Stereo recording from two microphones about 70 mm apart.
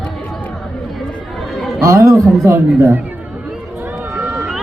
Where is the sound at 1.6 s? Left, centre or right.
Centre.